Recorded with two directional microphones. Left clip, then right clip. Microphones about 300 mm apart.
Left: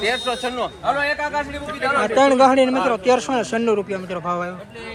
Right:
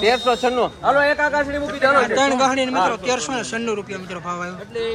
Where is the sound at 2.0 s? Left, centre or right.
Centre.